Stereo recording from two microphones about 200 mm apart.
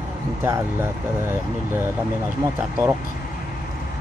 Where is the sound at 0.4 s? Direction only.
15° right (ahead or behind).